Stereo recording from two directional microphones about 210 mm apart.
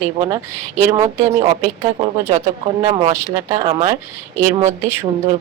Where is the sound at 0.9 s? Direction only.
15° right (ahead or behind).